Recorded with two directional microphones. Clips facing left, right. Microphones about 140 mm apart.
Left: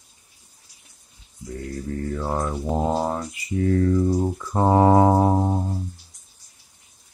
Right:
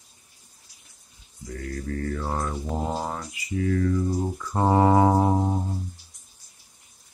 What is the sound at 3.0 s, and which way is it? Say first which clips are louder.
Speech: left 6 dB; 30° left (ahead or behind).